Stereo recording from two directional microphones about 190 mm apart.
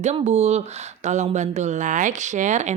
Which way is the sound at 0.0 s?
35° right (ahead or behind).